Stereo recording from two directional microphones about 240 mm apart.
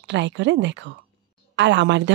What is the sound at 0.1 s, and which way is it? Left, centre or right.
A woman's voice, right.